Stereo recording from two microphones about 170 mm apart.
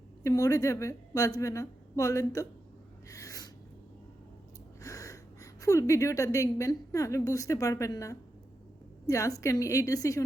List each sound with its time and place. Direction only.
0.2 s a woman's voice: 20° left (ahead or behind)
3.1 s a sound: 20° left (ahead or behind)
4.8 s a woman's voice: 20° left (ahead or behind)